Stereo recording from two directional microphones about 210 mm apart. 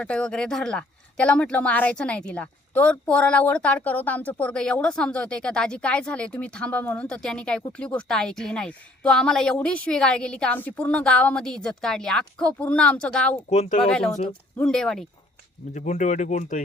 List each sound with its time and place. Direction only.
0.0 s speech: 5° left (ahead or behind)
13.5 s speech: 30° left (ahead or behind)
13.8 s speech: 5° left (ahead or behind)
15.7 s speech: 35° left (ahead or behind)